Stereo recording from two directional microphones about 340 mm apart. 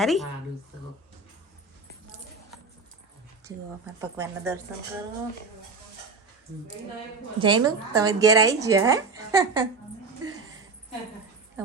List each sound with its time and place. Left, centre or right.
0.0 s a woman's voice: centre
4.0 s a woman's voice: centre
7.3 s a woman's voice: centre